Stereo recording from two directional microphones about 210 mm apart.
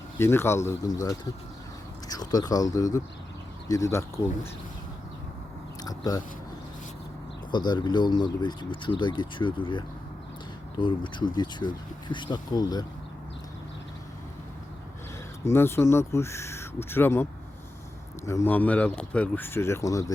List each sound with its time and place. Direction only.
0.2 s speech: 10° left (ahead or behind)
5.8 s speech: 15° left (ahead or behind)
7.5 s speech: 20° left (ahead or behind)
15.4 s speech: 10° left (ahead or behind)
18.3 s speech: 10° left (ahead or behind)